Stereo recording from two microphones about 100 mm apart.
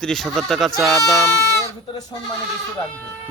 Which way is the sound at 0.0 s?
5° left (ahead or behind).